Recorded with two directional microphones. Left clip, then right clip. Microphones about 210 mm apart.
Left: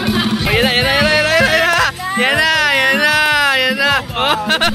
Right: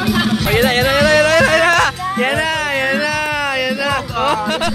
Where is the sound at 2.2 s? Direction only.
5° right (ahead or behind).